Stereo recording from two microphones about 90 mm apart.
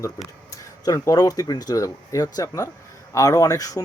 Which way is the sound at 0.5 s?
40° left (ahead or behind).